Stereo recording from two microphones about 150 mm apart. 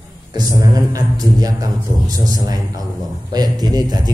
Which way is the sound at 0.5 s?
25° right (ahead or behind).